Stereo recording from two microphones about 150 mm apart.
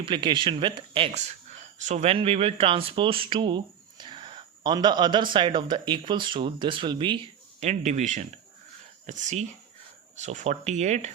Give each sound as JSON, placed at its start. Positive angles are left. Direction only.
{"t": 0.0, "sound": "speech", "side_deg": -30}
{"t": 7.6, "sound": "speech", "side_deg": -50}